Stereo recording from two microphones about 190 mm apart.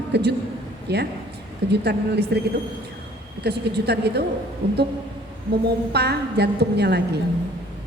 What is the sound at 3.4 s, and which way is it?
A woman's voice, 60° right (ahead or behind).